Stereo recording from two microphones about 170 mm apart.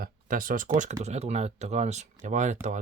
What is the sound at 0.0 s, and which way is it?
Speech, 55° right (ahead or behind).